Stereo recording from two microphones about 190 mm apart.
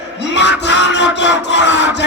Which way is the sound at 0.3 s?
65° left (ahead or behind).